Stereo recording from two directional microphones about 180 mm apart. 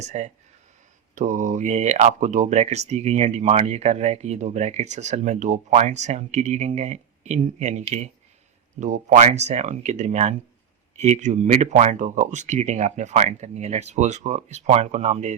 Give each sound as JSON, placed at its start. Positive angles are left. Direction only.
{"t": 0.0, "sound": "speech", "side_deg": -40}